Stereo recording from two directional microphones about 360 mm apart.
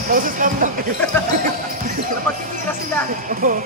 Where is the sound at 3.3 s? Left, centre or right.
Right.